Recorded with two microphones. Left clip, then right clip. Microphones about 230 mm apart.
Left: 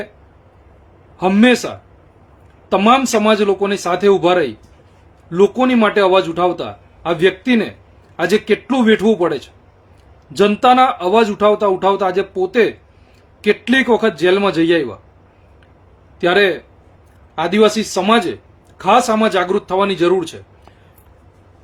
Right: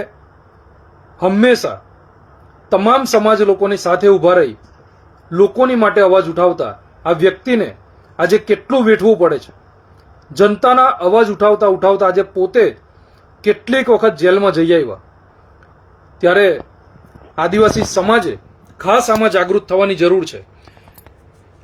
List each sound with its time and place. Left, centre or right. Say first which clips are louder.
1.2 s a man's voice: right 2 dB; centre
16.2 s a man's voice: right 3 dB; centre